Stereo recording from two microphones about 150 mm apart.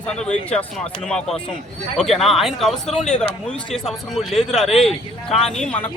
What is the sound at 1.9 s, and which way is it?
A man's voice, centre (ahead or behind).